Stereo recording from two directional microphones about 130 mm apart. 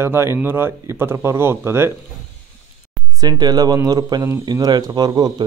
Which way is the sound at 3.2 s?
30° right (ahead or behind).